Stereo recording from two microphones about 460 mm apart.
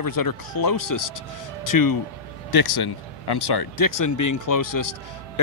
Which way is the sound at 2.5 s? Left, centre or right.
Left.